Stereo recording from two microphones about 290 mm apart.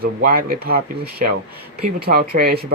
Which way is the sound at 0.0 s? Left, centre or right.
Right.